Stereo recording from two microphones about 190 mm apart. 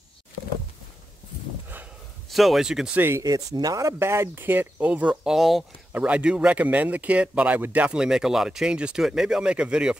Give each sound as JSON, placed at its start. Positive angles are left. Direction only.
{"t": 2.2, "sound": "speech", "side_deg": 0}